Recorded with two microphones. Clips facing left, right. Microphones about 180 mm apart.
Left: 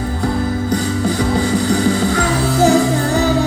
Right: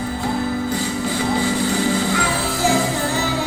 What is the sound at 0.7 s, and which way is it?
Music, 45° left (ahead or behind).